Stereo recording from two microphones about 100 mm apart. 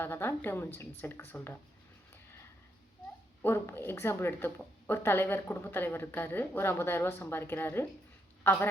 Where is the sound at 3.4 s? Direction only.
25° left (ahead or behind).